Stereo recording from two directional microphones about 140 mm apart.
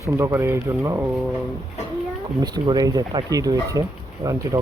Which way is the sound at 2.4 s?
30° right (ahead or behind).